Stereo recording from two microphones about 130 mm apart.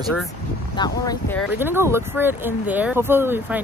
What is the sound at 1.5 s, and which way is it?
Speech, 15° right (ahead or behind).